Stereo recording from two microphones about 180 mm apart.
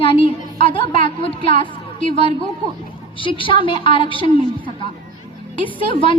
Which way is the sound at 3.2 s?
30° left (ahead or behind).